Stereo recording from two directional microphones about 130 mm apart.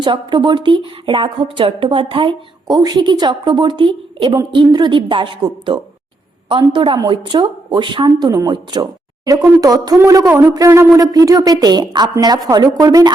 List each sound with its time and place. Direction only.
0.0 s speech: 40° right (ahead or behind)